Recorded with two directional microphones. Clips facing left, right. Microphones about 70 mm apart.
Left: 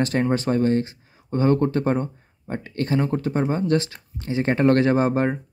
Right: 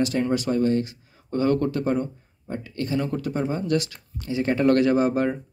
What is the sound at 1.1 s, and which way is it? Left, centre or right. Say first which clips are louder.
Speech: left 2 dB; left.